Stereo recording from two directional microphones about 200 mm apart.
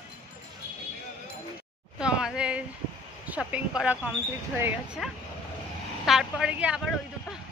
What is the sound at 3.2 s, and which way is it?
Speech, 5° right (ahead or behind).